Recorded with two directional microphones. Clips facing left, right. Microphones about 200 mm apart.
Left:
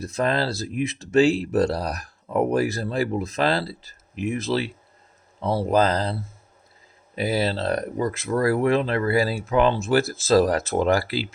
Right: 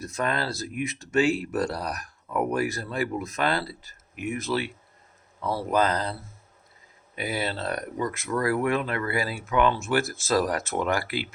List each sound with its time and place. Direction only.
0.1 s speech: 30° left (ahead or behind)
7.2 s speech: 35° left (ahead or behind)